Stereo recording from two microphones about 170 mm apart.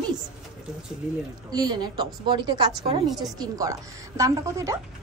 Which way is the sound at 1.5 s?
25° right (ahead or behind).